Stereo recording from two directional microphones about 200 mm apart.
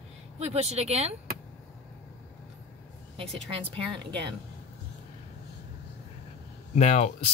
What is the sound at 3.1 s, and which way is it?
Speech, 30° right (ahead or behind).